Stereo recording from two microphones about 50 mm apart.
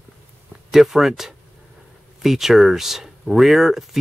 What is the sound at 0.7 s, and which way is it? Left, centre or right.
Speech, centre.